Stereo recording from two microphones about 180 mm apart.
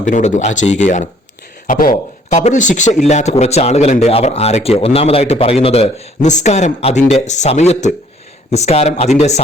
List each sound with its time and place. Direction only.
0.0 s a man's voice: 40° left (ahead or behind)